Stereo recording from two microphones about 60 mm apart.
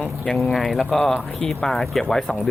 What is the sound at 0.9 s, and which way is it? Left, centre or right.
Speech, centre.